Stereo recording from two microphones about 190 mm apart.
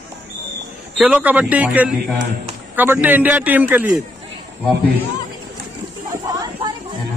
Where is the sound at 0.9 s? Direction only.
5° right (ahead or behind).